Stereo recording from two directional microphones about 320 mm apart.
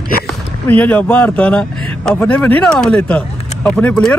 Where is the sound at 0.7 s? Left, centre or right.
Centre.